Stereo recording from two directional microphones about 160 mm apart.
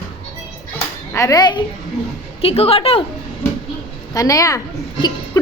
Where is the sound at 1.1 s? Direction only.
20° left (ahead or behind).